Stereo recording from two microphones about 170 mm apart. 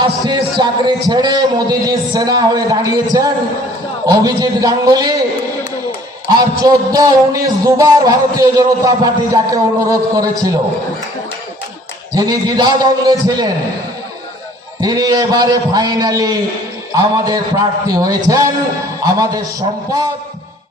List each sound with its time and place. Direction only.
0.3 s a man's voice: 25° right (ahead or behind)
6.2 s a man's voice: 25° right (ahead or behind)
12.1 s a man's voice: 20° right (ahead or behind)
14.8 s a man's voice: 25° right (ahead or behind)